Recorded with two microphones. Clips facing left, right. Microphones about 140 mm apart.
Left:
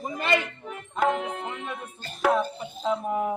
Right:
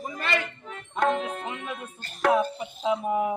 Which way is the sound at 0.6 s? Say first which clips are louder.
Even; 10° left (ahead or behind).